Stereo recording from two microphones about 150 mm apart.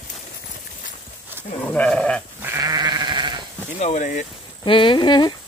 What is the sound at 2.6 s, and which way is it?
Sheep, 25° right (ahead or behind).